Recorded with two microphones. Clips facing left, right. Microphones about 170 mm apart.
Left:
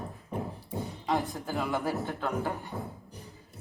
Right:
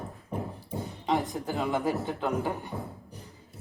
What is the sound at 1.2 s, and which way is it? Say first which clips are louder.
A man's voice: right 2 dB; 20° right (ahead or behind).